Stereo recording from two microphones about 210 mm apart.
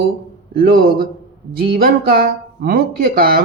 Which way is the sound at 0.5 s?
45° right (ahead or behind).